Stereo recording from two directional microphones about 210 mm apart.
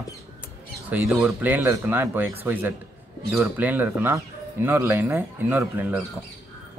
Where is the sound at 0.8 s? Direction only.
5° right (ahead or behind).